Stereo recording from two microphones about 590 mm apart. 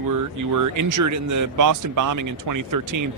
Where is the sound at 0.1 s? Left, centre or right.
Right.